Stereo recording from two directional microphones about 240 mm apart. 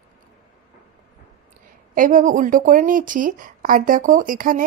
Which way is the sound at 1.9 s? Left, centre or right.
Right.